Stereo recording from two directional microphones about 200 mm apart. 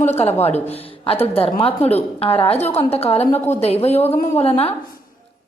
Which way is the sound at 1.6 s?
30° left (ahead or behind).